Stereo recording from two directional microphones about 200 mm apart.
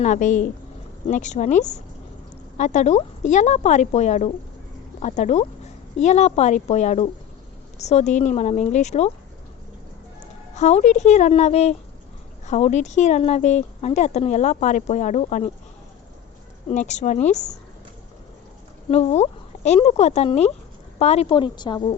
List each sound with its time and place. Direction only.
0.0 s speech: 40° left (ahead or behind)
10.5 s speech: 35° left (ahead or behind)
16.6 s speech: 35° left (ahead or behind)
18.9 s a woman's voice: 35° left (ahead or behind)